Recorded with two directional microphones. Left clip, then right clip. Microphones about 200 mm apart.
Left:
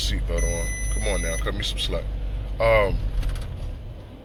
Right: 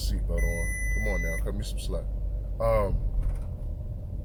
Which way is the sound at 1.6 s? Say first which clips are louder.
Left 11 dB; 15° right (ahead or behind).